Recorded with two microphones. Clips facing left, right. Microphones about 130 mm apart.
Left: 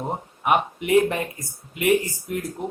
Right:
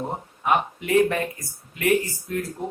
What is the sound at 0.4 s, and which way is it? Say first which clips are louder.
Speech: left 1 dB; 20° left (ahead or behind).